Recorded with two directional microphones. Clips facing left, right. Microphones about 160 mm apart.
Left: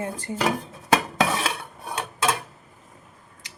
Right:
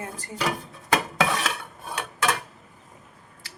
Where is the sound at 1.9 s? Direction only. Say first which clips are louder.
Left 1 dB; 25° left (ahead or behind).